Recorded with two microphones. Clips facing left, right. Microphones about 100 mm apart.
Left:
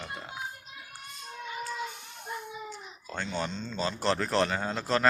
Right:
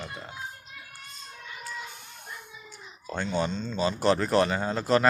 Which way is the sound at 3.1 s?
5° right (ahead or behind).